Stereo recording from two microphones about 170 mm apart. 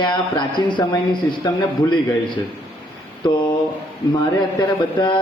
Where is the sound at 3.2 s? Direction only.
30° left (ahead or behind).